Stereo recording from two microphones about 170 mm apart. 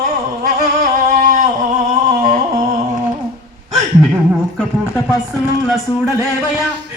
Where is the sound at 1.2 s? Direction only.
55° right (ahead or behind).